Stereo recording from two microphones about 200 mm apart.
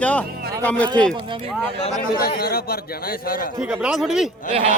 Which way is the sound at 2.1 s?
50° left (ahead or behind).